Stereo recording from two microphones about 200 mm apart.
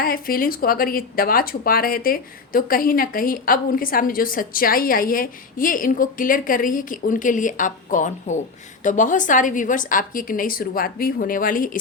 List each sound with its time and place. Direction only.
0.0 s speech: 45° left (ahead or behind)